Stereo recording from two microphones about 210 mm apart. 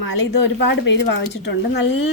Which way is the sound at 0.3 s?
55° left (ahead or behind).